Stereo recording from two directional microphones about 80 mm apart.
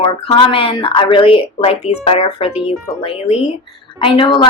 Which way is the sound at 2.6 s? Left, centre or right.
Left.